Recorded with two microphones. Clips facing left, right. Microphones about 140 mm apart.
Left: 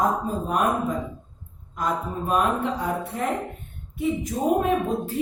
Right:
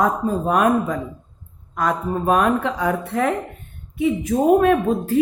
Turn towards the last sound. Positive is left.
turn(degrees=-90)